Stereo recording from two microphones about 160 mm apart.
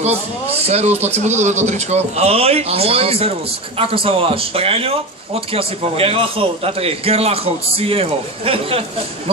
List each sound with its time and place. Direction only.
0.0 s a man's voice: 40° right (ahead or behind)